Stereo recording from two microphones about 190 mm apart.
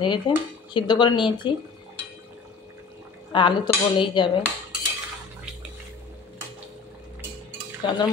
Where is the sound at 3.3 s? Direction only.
25° left (ahead or behind).